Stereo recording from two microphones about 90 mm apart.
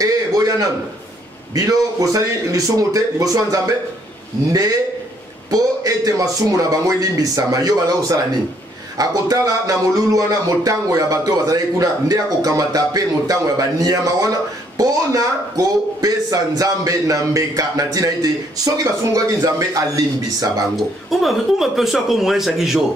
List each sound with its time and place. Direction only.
0.0 s a sound: 40° right (ahead or behind)
1.5 s a man's voice: 40° right (ahead or behind)
20.7 s speech: centre (ahead or behind)